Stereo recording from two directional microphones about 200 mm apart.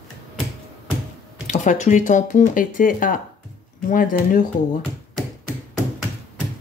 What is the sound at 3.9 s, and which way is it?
Music, 45° left (ahead or behind).